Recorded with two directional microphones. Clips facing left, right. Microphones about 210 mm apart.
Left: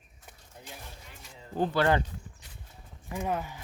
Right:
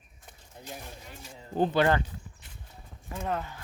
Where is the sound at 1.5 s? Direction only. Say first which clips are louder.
Right 2 dB; 20° right (ahead or behind).